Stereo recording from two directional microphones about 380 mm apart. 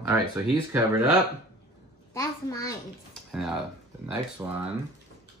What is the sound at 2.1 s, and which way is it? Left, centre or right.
A child's voice, centre.